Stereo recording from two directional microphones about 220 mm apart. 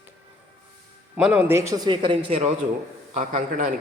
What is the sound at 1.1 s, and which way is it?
A man's voice, 5° right (ahead or behind).